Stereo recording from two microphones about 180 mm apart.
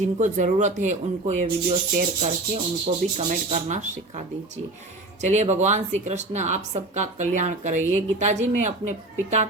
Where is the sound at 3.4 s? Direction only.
40° right (ahead or behind).